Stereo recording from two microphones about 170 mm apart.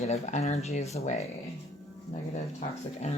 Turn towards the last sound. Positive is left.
turn(degrees=40)  # may be behind; listen again after turning